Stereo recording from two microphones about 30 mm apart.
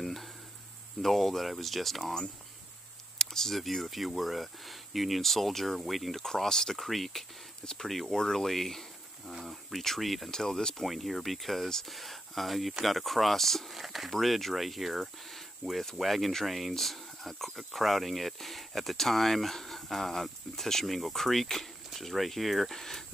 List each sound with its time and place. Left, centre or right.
0.0 s sizzle: centre
1.0 s speech: centre
3.2 s computer keyboard: centre
3.5 s speech: centre
6.1 s speech: centre
6.8 s speech: centre
10.3 s speech: centre
10.8 s speech: centre
13.7 s speech: centre
14.1 s speech: centre
15.3 s a sound: centre
16.0 s speech: centre